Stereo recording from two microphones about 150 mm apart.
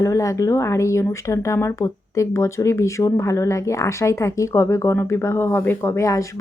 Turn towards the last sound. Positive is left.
turn(degrees=20)  # may be behind; listen again after turning